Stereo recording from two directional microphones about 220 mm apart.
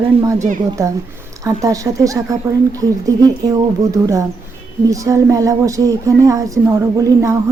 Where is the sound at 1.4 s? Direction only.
15° right (ahead or behind).